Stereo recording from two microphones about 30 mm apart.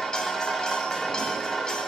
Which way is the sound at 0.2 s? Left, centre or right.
Centre.